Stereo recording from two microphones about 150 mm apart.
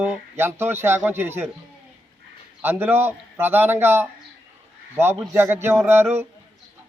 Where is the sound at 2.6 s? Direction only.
15° right (ahead or behind).